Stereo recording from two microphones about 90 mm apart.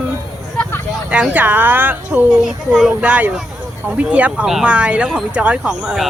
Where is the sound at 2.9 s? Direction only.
15° right (ahead or behind).